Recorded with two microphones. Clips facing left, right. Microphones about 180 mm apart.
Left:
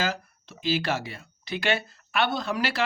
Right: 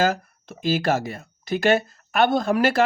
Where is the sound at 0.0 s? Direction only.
50° right (ahead or behind).